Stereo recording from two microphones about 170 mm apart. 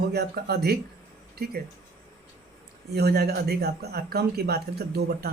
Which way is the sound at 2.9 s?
70° right (ahead or behind).